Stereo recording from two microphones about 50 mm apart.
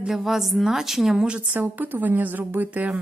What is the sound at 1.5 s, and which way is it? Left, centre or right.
A woman's voice, right.